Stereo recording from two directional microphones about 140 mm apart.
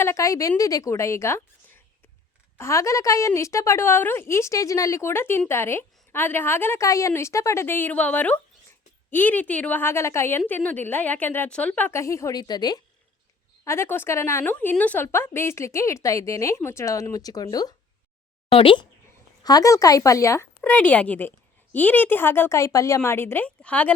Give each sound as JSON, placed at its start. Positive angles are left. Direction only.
{"t": 0.0, "sound": "a woman's voice", "side_deg": 20}
{"t": 13.7, "sound": "a woman's voice", "side_deg": 15}
{"t": 18.5, "sound": "speech", "side_deg": 40}
{"t": 19.4, "sound": "a woman's voice", "side_deg": 25}